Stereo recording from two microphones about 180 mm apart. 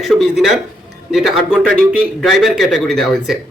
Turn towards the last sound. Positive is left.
turn(degrees=0)  # may be behind; listen again after turning